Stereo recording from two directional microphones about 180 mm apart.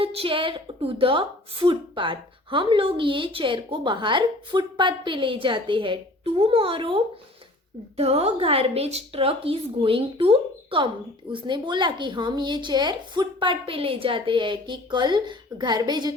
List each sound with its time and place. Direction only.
0.0 s a woman's voice: 30° right (ahead or behind)